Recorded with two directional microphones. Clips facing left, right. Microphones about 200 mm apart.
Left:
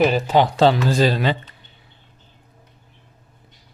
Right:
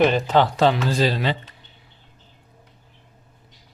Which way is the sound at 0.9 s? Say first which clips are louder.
Left 3 dB; 50° left (ahead or behind).